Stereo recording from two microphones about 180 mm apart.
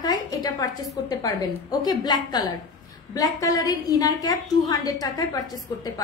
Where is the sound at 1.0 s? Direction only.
20° left (ahead or behind).